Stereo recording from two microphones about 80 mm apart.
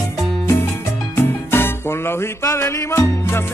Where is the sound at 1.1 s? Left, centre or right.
Left.